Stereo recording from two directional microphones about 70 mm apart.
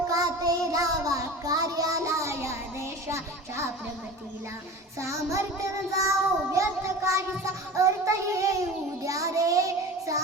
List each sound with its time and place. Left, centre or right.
0.1 s child singing: right
4.9 s child singing: right